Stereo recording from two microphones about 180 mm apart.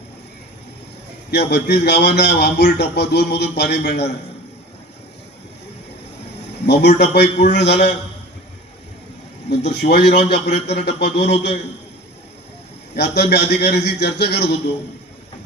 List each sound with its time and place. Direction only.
1.3 s a man's voice: 65° left (ahead or behind)
6.8 s a man's voice: 65° left (ahead or behind)
9.5 s a man's voice: 65° left (ahead or behind)
13.0 s a man's voice: 65° left (ahead or behind)